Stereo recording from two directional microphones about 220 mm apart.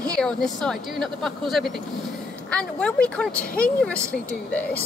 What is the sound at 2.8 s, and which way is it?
Speech, 5° left (ahead or behind).